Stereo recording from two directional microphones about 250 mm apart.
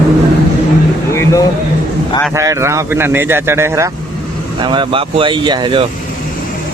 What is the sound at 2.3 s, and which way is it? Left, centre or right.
Speech, centre.